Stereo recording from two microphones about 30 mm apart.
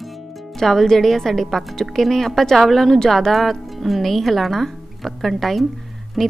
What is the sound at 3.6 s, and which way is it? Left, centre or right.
A woman's voice, centre.